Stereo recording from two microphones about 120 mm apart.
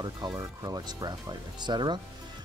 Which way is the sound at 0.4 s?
30° right (ahead or behind).